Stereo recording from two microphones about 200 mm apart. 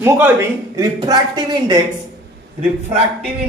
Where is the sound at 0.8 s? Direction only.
20° right (ahead or behind).